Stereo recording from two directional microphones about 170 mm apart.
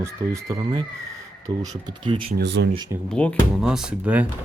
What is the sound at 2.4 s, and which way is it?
Speech, 90° right.